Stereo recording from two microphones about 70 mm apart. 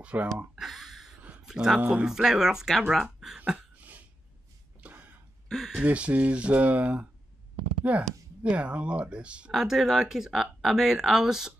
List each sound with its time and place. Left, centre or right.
0.0 s speech: right
0.6 s a sound: centre
1.4 s speech: centre
3.5 s a sound: right
5.9 s speech: centre
9.5 s speech: centre